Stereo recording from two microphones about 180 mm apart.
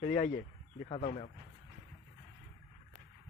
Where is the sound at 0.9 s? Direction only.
35° left (ahead or behind).